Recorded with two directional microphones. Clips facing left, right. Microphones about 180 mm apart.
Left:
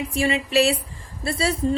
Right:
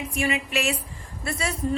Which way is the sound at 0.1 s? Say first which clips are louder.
Left 5 dB; 30° left (ahead or behind).